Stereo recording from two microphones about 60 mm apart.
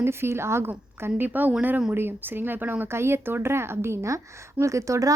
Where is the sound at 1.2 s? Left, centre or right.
Right.